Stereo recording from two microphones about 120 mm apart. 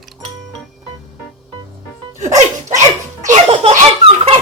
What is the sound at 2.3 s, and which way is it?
Music, 80° right.